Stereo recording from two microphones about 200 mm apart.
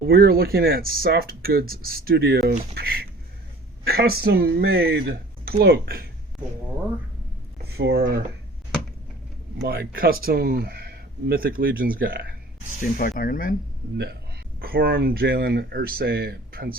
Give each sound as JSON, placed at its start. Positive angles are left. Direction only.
{"t": 0.1, "sound": "speech", "side_deg": -50}
{"t": 7.8, "sound": "speech", "side_deg": -55}
{"t": 9.6, "sound": "speech", "side_deg": -55}
{"t": 12.8, "sound": "speech", "side_deg": 45}
{"t": 13.9, "sound": "a man's voice", "side_deg": -55}